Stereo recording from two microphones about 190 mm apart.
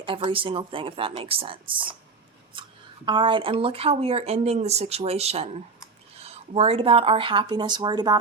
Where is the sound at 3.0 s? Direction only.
25° right (ahead or behind).